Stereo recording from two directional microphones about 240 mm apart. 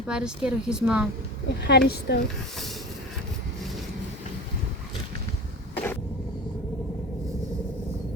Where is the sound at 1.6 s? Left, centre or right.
Left.